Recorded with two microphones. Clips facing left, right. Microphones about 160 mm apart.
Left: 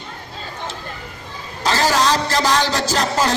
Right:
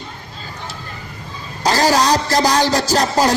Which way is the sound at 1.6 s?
40° right (ahead or behind).